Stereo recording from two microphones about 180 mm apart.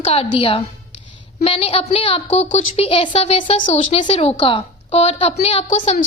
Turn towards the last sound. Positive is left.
turn(degrees=40)  # may be behind; listen again after turning